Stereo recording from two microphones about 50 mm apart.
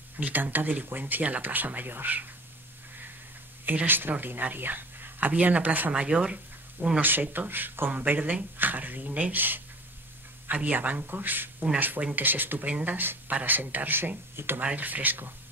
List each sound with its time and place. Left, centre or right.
0.2 s speech: right
3.6 s speech: right
5.3 s speech: right
7.0 s speech: right
12.0 s speech: right
12.3 s speech: right
14.6 s speech: right